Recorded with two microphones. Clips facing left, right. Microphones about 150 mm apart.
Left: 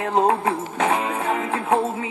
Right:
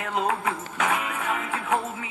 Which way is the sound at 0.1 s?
30° left (ahead or behind).